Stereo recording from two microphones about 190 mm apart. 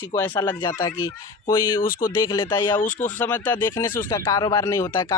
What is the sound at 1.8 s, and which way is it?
Speech, 50° left (ahead or behind).